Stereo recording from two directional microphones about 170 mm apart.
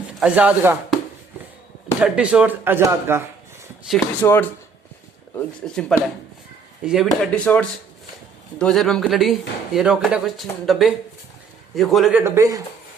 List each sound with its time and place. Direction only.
0.2 s speech: 5° right (ahead or behind)
2.0 s speech: 5° right (ahead or behind)
3.8 s speech: 5° left (ahead or behind)
5.6 s speech: 5° left (ahead or behind)
12.1 s speech: 15° right (ahead or behind)